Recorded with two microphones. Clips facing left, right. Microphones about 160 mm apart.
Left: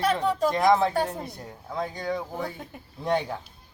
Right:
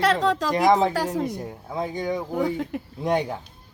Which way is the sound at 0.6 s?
15° right (ahead or behind).